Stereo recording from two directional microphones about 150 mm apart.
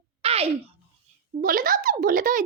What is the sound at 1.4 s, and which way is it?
A child's voice, 70° right (ahead or behind).